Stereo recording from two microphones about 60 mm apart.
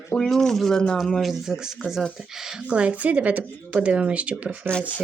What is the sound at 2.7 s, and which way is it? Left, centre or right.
Speech, right.